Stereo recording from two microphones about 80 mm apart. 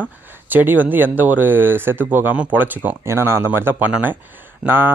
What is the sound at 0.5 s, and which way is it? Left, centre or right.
Speech, right.